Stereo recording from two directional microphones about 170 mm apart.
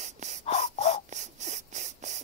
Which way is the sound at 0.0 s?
45° right (ahead or behind).